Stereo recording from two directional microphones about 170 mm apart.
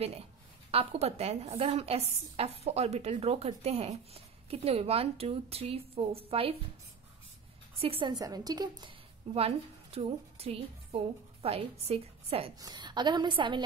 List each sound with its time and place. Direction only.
0.7 s a woman's voice: 35° right (ahead or behind)
7.8 s a woman's voice: 30° right (ahead or behind)
9.3 s a woman's voice: 35° right (ahead or behind)
12.5 s a woman's voice: 25° right (ahead or behind)